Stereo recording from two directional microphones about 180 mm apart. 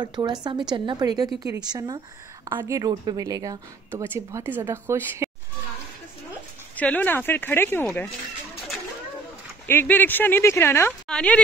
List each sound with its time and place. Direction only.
0.0 s a woman's voice: 25° right (ahead or behind)
6.8 s speech: 10° left (ahead or behind)
9.7 s a woman's voice: 10° left (ahead or behind)